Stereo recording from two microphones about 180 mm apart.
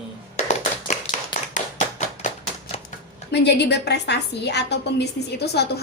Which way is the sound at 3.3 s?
70° left (ahead or behind).